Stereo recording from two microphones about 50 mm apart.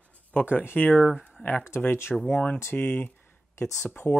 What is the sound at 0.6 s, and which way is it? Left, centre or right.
Speech, left.